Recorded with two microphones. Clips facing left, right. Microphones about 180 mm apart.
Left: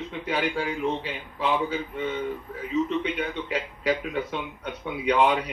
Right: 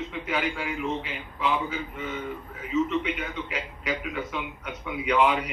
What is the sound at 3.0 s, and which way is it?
A man's voice, 35° left (ahead or behind).